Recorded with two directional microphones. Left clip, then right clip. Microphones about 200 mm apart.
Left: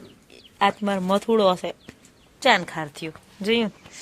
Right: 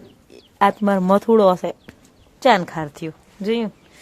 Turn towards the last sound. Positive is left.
turn(degrees=-15)  # may be behind; listen again after turning